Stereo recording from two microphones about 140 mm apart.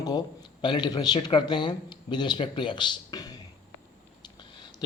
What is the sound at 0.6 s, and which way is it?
A man's voice, 35° left (ahead or behind).